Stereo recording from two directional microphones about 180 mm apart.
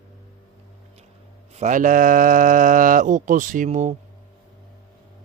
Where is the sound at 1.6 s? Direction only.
45° right (ahead or behind).